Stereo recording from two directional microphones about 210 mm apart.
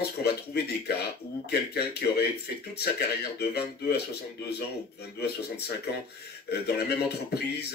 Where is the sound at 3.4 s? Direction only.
50° left (ahead or behind).